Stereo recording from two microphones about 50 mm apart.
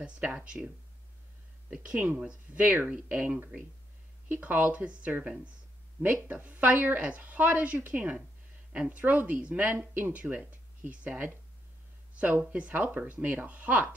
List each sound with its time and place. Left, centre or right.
0.0 s speech: right
1.7 s speech: right
2.5 s a woman's voice: right
2.9 s speech: centre
4.3 s a woman's voice: right
6.2 s a woman's voice: right